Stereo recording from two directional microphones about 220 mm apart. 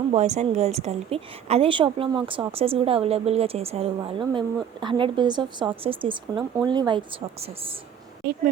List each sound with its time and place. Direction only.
0.1 s a woman's voice: 30° right (ahead or behind)